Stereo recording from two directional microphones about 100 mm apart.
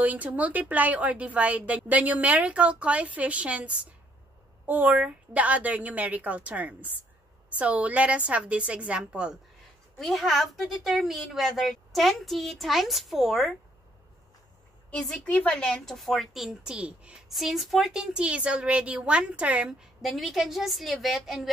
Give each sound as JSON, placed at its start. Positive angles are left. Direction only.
{"t": 0.0, "sound": "a woman's voice", "side_deg": -15}
{"t": 9.9, "sound": "speech", "side_deg": 0}
{"t": 14.9, "sound": "speech", "side_deg": 10}
{"t": 20.0, "sound": "speech", "side_deg": 0}